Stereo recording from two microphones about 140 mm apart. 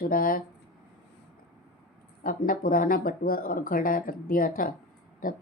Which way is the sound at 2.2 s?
90° left.